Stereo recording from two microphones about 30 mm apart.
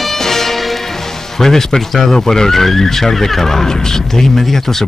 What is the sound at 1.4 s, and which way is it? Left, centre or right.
Speech, centre.